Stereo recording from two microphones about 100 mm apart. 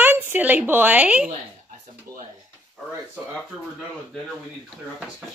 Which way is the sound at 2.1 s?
35° right (ahead or behind).